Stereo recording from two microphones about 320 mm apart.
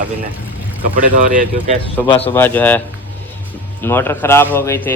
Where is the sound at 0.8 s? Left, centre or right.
Right.